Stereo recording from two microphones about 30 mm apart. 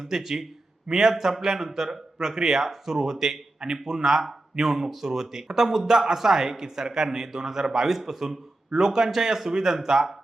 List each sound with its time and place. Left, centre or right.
0.0 s a man's voice: centre
2.6 s a man's voice: centre